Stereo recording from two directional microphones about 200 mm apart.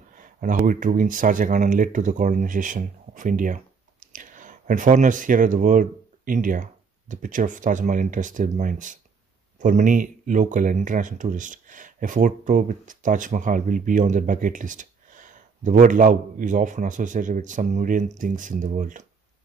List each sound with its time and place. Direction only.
0.1 s speech: 40° right (ahead or behind)